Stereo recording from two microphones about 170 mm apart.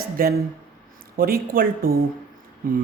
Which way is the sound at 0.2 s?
65° right (ahead or behind).